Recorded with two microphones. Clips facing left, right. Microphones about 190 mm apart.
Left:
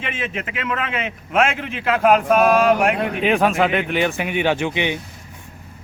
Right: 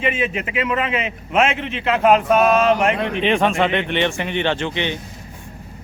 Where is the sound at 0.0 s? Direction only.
Centre (ahead or behind).